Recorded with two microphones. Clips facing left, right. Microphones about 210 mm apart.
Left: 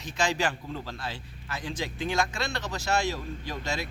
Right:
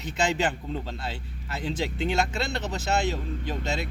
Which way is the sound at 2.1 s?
25° right (ahead or behind).